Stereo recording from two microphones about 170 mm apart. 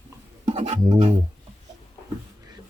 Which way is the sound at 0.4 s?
40° right (ahead or behind).